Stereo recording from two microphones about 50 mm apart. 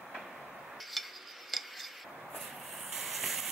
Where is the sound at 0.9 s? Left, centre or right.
Centre.